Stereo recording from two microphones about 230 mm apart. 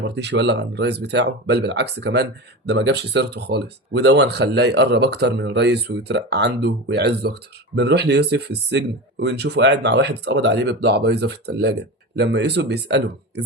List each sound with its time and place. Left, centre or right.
0.0 s speech: right